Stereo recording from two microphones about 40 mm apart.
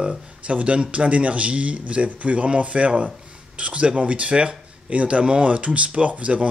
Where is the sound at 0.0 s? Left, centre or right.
Right.